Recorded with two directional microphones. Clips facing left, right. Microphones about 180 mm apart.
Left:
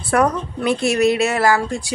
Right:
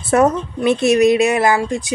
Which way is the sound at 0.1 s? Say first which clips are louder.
Right 3 dB; 20° right (ahead or behind).